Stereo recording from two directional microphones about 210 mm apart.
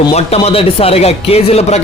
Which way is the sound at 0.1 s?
30° left (ahead or behind).